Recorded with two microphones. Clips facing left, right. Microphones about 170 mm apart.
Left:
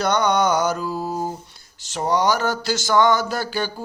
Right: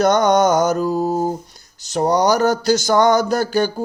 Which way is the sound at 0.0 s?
45° right (ahead or behind).